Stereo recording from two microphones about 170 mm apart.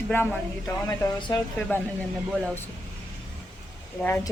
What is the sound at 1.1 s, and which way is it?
Speech, 25° left (ahead or behind).